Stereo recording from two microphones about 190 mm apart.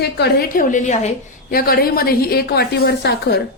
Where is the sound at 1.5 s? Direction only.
50° left (ahead or behind).